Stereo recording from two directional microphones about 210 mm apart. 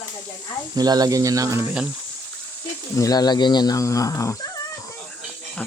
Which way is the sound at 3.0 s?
15° left (ahead or behind).